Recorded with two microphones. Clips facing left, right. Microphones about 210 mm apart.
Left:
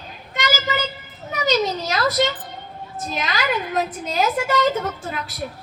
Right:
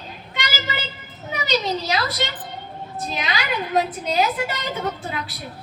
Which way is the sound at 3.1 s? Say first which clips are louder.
Left 3 dB; 45° left (ahead or behind).